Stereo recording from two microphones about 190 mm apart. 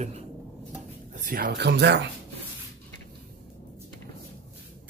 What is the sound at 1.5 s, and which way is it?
Speech, 65° right (ahead or behind).